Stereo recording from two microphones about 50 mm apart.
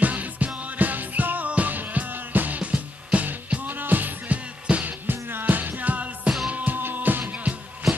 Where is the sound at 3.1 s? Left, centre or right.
Right.